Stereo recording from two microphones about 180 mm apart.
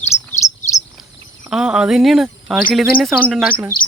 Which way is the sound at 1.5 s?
5° right (ahead or behind).